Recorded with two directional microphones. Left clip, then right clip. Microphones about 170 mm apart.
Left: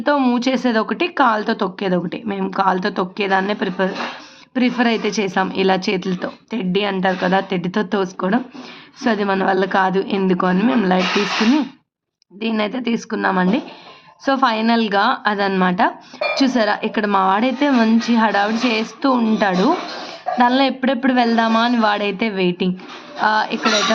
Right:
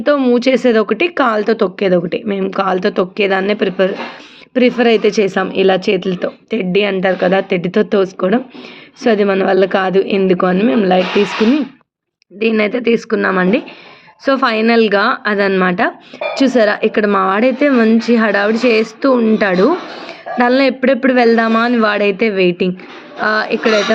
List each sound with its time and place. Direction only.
0.0 s speech: 10° right (ahead or behind)
12.4 s speech: 15° right (ahead or behind)